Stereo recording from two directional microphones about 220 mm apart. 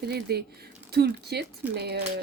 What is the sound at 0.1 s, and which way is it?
Speech, 45° right (ahead or behind).